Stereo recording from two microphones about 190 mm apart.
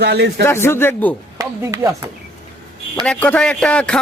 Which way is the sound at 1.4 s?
15° right (ahead or behind).